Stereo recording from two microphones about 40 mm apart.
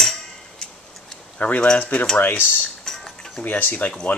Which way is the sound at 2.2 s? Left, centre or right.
Left.